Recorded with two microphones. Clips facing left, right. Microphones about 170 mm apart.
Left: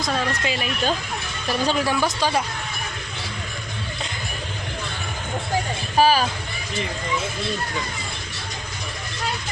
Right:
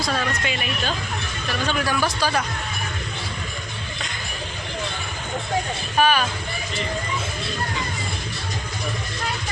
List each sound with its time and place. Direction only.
0.0 s speech: 30° left (ahead or behind)
6.0 s speech: 35° left (ahead or behind)